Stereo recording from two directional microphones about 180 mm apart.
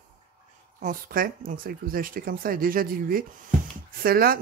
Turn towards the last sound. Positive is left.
turn(degrees=-55)  # may be behind; listen again after turning